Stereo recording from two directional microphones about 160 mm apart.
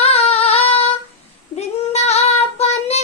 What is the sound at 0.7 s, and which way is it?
Female singing, 35° left (ahead or behind).